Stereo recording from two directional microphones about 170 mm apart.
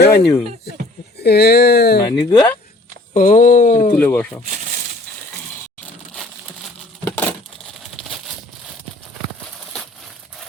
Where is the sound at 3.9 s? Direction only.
10° left (ahead or behind).